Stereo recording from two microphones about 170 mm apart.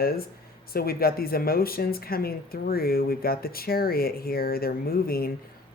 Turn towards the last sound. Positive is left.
turn(degrees=60)  # may be behind; listen again after turning